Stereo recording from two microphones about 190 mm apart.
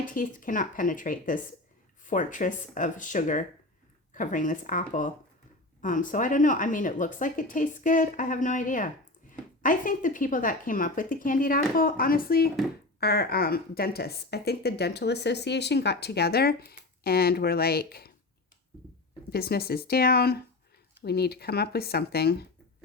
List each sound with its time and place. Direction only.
0.0 s a woman's voice: 45° left (ahead or behind)
19.3 s speech: 55° left (ahead or behind)